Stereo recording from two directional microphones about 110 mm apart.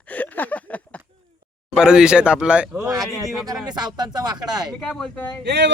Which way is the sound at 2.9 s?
30° right (ahead or behind).